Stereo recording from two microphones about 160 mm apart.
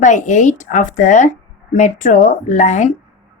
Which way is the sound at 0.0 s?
50° left (ahead or behind).